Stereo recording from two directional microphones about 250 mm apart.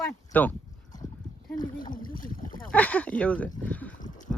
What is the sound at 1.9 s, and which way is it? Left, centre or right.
Speech, left.